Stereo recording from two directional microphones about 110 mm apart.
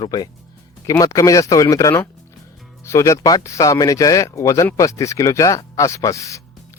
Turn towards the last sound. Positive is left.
turn(degrees=30)  # may be behind; listen again after turning